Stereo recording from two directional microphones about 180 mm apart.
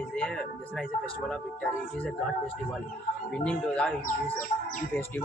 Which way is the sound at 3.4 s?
5° left (ahead or behind).